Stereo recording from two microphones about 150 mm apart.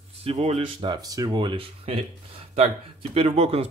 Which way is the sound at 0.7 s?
25° right (ahead or behind).